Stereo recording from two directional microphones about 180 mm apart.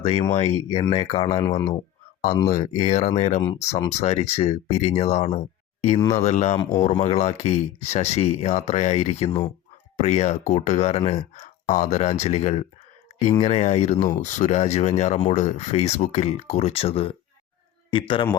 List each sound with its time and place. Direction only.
0.0 s speech: 35° left (ahead or behind)
1.5 s a man's voice: 20° left (ahead or behind)
2.5 s a man's voice: 40° left (ahead or behind)